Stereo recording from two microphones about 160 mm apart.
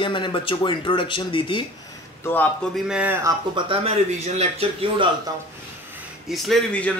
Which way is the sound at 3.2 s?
30° right (ahead or behind).